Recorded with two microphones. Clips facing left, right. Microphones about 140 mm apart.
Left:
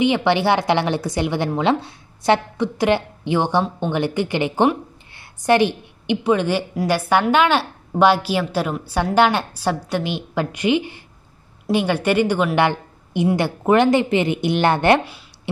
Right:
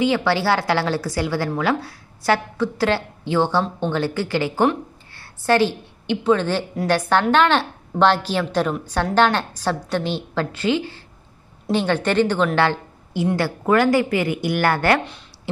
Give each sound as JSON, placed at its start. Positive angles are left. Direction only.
{"t": 0.0, "sound": "a woman's voice", "side_deg": 20}